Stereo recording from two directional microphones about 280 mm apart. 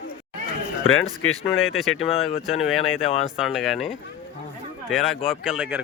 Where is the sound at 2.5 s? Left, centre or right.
Centre.